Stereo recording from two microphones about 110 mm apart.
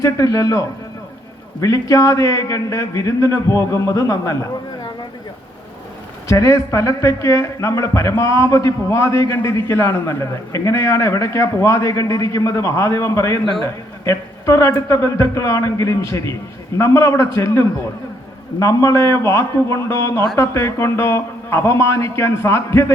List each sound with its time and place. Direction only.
0.0 s a man's voice: 30° left (ahead or behind)
1.6 s a man's voice: 30° left (ahead or behind)
6.2 s a man's voice: 30° left (ahead or behind)